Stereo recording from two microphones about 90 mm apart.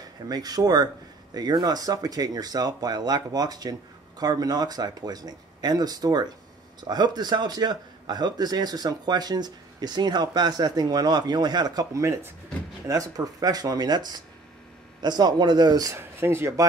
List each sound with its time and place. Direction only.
0.3 s speech: 45° right (ahead or behind)
15.9 s speech: 30° right (ahead or behind)